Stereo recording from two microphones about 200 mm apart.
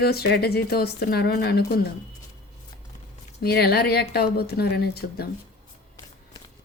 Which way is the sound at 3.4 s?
50° left (ahead or behind).